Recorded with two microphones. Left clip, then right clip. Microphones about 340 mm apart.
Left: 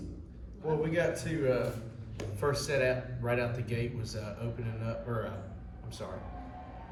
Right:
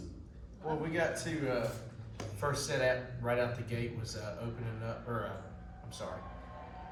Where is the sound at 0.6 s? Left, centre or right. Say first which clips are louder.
Left 4 dB; centre.